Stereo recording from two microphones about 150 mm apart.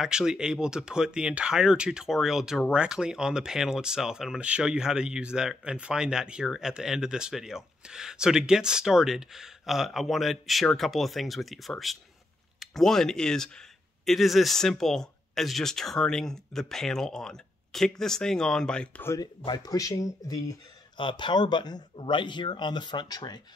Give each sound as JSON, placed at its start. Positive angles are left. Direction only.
{"t": 0.0, "sound": "speech", "side_deg": -5}
{"t": 19.1, "sound": "speech", "side_deg": 25}
{"t": 21.0, "sound": "speech", "side_deg": 35}